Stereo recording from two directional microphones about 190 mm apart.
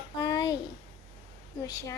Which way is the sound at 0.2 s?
20° left (ahead or behind).